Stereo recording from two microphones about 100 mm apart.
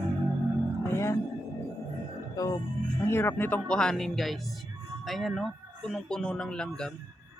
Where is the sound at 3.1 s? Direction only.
25° left (ahead or behind).